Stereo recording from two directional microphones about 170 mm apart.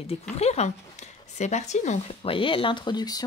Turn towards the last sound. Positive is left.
turn(degrees=25)  # may be behind; listen again after turning